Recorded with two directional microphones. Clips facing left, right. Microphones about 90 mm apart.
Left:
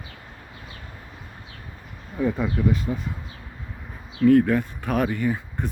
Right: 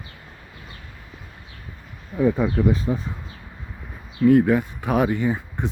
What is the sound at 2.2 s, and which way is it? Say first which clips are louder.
Speech: right 4 dB; 15° right (ahead or behind).